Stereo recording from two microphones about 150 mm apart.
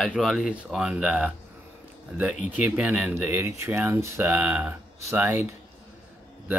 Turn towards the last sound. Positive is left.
turn(degrees=-15)  # may be behind; listen again after turning